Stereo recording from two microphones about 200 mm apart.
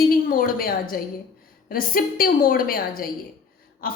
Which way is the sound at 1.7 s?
45° left (ahead or behind).